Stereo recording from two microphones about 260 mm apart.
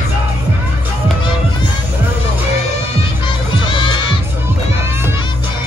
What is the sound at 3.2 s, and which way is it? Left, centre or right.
Crowd, centre.